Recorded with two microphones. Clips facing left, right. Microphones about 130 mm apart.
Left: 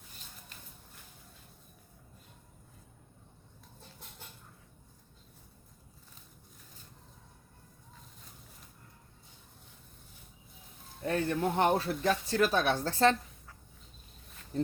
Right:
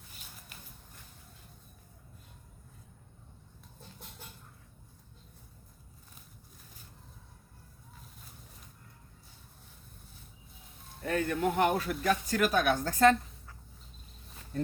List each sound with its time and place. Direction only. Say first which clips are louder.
11.0 s speech: even; 30° left (ahead or behind)